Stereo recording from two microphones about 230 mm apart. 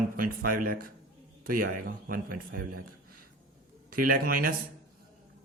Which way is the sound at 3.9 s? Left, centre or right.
Right.